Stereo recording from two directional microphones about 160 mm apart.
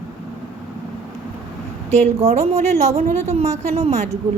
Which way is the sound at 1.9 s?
45° right (ahead or behind).